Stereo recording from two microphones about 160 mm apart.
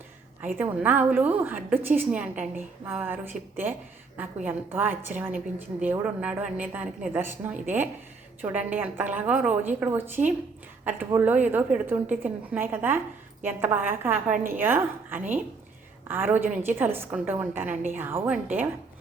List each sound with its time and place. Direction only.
0.6 s a woman's voice: 10° right (ahead or behind)